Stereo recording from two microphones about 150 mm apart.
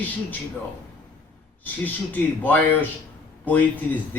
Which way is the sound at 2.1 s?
10° left (ahead or behind).